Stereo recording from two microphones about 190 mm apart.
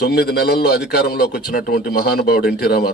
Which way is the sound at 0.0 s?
55° left (ahead or behind).